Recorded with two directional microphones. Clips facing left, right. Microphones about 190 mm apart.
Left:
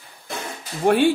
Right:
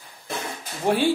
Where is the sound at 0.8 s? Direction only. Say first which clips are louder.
Left 4 dB; 55° left (ahead or behind).